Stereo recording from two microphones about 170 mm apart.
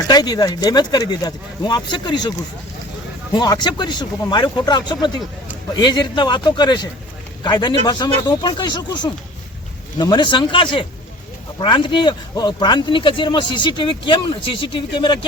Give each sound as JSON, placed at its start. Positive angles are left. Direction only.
{"t": 0.1, "sound": "speech", "side_deg": 25}
{"t": 3.3, "sound": "speech", "side_deg": 25}